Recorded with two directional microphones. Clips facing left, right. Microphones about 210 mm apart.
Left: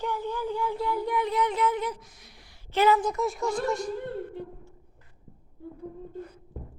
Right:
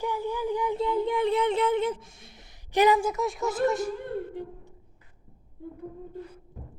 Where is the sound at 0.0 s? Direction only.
10° right (ahead or behind).